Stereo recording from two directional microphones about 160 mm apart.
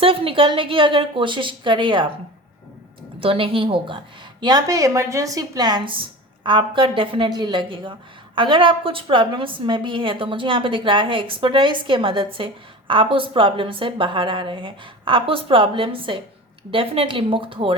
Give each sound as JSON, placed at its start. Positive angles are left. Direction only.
{"t": 0.0, "sound": "a woman's voice", "side_deg": -35}
{"t": 3.2, "sound": "a woman's voice", "side_deg": -35}